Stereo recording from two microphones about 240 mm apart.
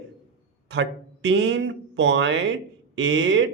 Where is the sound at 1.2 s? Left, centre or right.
Right.